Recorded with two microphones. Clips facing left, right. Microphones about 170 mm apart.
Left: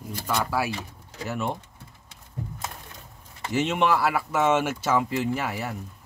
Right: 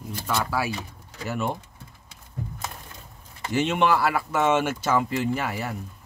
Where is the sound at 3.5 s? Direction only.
Centre (ahead or behind).